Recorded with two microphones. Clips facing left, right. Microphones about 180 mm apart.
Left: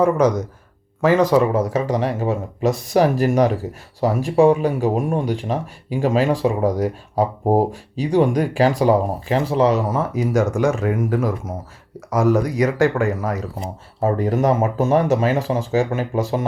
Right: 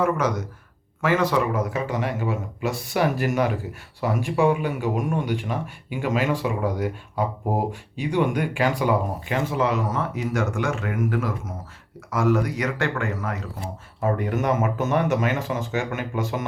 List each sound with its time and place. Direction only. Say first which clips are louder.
0.2 s speech: left 8 dB; 15° left (ahead or behind)
1.0 s speech: left 6 dB; 40° left (ahead or behind)